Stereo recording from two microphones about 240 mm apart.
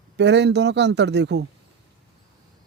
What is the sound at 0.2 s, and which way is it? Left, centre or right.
Speech, right.